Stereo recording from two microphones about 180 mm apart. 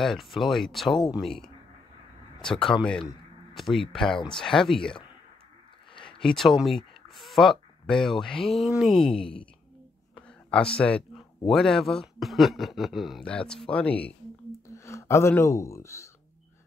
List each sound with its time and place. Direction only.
0.0 s speech: centre (ahead or behind)
6.1 s speech: 5° left (ahead or behind)
10.1 s a sound: 5° left (ahead or behind)
10.8 s speech: 5° left (ahead or behind)